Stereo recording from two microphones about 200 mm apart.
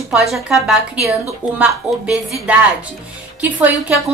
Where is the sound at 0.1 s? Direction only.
Centre (ahead or behind).